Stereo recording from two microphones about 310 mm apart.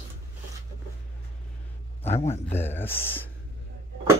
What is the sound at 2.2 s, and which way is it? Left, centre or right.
Speech, centre.